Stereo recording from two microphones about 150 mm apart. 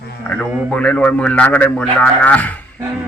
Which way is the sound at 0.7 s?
10° left (ahead or behind).